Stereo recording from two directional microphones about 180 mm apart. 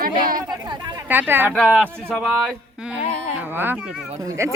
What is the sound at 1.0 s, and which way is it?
Speech, 10° right (ahead or behind).